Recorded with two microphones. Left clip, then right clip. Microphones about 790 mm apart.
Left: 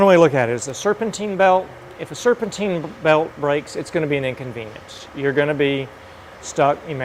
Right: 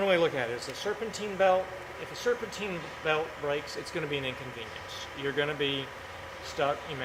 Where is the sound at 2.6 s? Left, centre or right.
Left.